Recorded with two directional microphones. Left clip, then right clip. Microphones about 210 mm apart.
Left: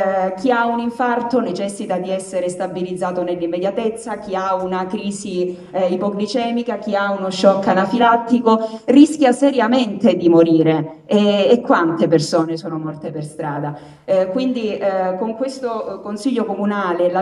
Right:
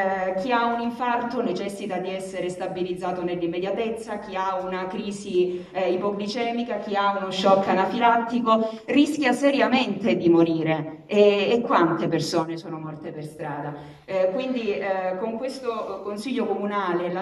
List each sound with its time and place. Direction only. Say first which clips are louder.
0.0 s a woman's voice: left 7 dB; 50° left (ahead or behind)
14.0 s a woman's voice: left 7 dB; 50° left (ahead or behind)